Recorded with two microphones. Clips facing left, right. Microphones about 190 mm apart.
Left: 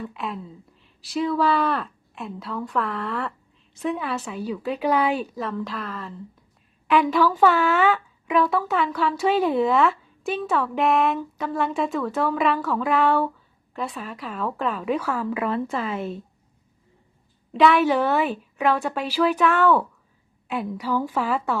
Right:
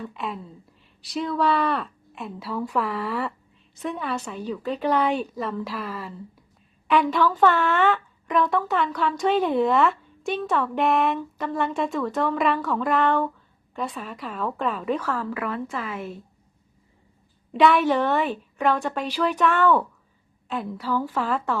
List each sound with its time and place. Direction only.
0.0 s speech: centre (ahead or behind); by 16.1 s 25° left (ahead or behind)
17.5 s speech: centre (ahead or behind)
20.5 s a woman's voice: 15° left (ahead or behind)